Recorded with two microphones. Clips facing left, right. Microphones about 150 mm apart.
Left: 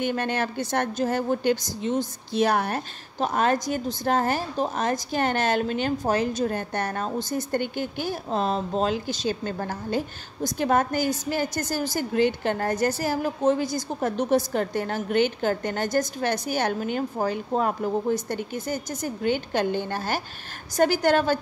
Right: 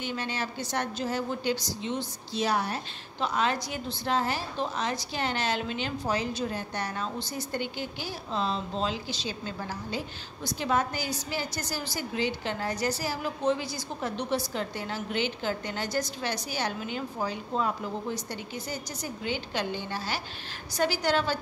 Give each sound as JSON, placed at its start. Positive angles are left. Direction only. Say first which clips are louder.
{"t": 0.0, "sound": "a woman's voice", "louder": "left 7 dB", "side_deg": 55}